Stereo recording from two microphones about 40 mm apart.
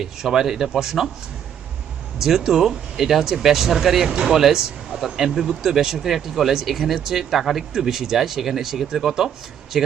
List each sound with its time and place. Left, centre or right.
0.0 s speech: centre
2.1 s speech: centre